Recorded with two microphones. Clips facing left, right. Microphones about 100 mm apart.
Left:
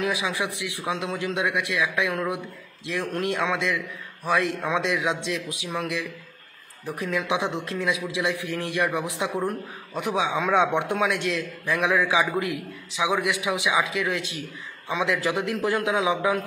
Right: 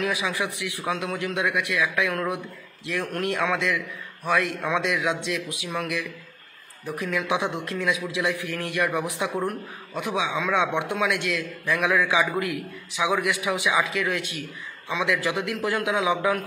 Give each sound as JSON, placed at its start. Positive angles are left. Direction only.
{"t": 0.0, "sound": "a man's voice", "side_deg": 20}
{"t": 7.1, "sound": "a man's voice", "side_deg": 20}
{"t": 15.0, "sound": "a man's voice", "side_deg": 30}